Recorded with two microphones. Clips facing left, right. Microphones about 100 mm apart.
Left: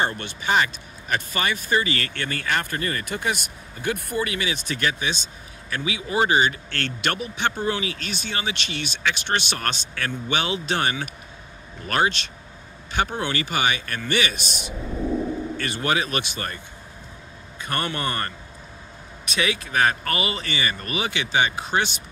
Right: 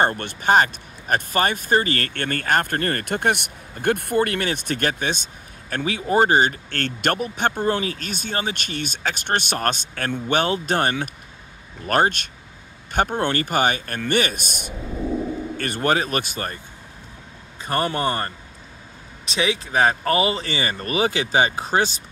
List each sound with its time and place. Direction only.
0.0 s speech: 50° right (ahead or behind)
14.7 s a sound: centre (ahead or behind)
15.5 s speech: 50° right (ahead or behind)
17.6 s speech: 30° right (ahead or behind)